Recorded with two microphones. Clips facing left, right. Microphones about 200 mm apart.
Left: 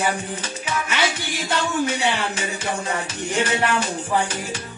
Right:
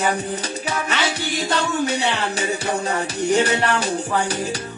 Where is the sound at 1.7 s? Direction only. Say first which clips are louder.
Right 1 dB; 40° right (ahead or behind).